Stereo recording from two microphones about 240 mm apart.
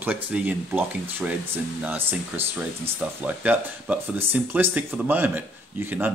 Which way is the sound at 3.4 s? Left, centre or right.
Centre.